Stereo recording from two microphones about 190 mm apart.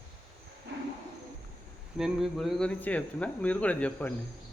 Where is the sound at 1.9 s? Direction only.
Centre (ahead or behind).